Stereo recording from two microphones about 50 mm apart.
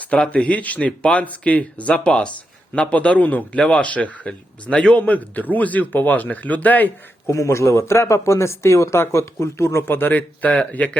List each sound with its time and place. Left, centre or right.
0.0 s a man's voice: left
7.3 s speech: left
9.8 s a man's voice: left